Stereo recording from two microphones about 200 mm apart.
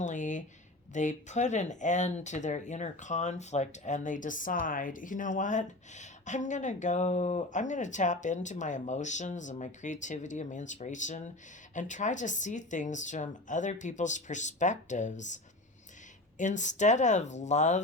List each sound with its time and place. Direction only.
0.0 s a sound: 40° left (ahead or behind)
0.9 s speech: 35° left (ahead or behind)
16.4 s speech: 35° left (ahead or behind)